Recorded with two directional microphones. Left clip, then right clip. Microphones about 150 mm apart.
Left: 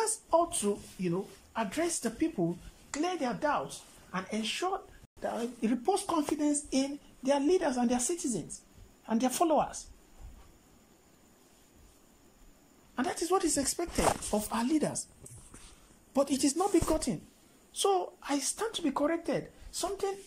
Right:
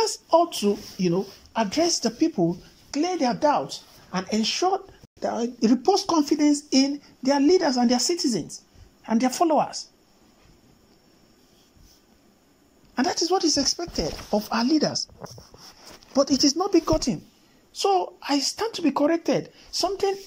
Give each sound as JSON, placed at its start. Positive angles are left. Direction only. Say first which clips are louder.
{"t": 0.0, "sound": "speech", "louder": "right 8 dB", "side_deg": -15}
{"t": 12.9, "sound": "a woman's voice", "louder": "right 7 dB", "side_deg": -10}
{"t": 16.1, "sound": "speech", "louder": "right 8 dB", "side_deg": 5}